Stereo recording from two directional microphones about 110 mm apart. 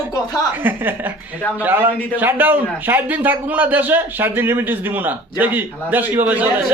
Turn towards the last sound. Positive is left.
turn(degrees=-15)  # may be behind; listen again after turning